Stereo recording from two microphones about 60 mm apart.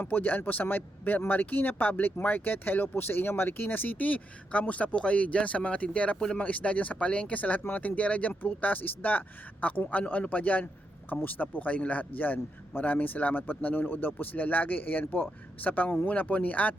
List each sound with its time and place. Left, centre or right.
0.0 s speech: left